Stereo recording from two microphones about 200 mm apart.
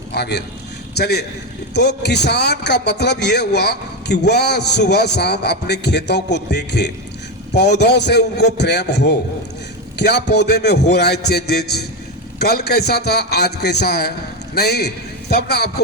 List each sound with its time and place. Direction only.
0.1 s a man's voice: 55° left (ahead or behind)